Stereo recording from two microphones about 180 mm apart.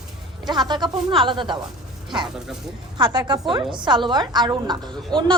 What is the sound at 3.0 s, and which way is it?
A woman's voice, 25° right (ahead or behind).